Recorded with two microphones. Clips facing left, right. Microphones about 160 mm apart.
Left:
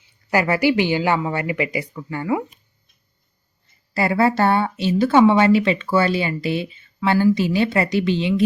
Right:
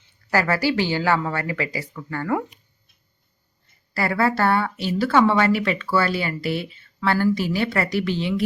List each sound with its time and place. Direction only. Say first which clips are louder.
0.0 s a woman's voice: left 2 dB; 15° left (ahead or behind)
3.9 s speech: left 3 dB; 20° left (ahead or behind)